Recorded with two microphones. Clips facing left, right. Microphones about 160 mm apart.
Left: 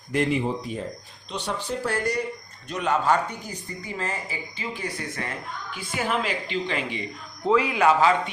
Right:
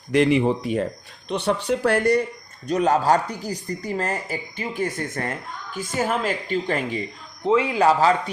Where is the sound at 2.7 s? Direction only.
40° right (ahead or behind).